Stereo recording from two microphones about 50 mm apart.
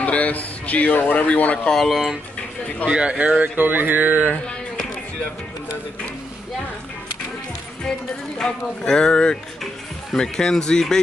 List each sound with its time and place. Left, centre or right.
0.0 s speech: left
1.9 s speech: centre
2.9 s speech: right
3.3 s speech: right
8.4 s a man's voice: centre